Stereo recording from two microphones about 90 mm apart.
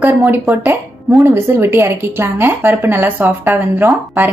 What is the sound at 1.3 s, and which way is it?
A woman's voice, 25° right (ahead or behind).